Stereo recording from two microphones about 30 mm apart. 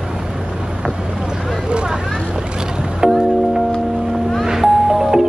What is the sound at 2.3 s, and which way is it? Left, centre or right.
Boat, right.